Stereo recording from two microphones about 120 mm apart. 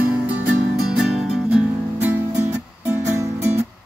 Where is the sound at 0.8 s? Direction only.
5° right (ahead or behind).